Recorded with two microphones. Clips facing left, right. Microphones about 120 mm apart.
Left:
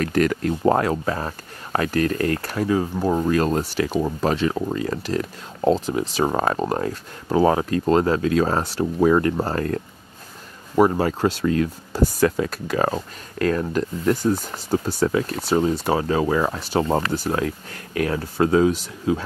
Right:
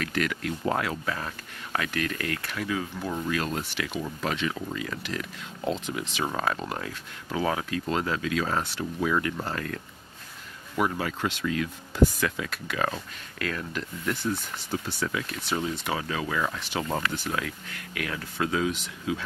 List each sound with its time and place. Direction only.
0.0 s speech: 40° left (ahead or behind)
10.8 s speech: 40° left (ahead or behind)